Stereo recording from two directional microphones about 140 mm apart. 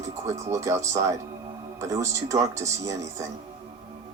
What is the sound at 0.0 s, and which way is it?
Speech, 20° right (ahead or behind).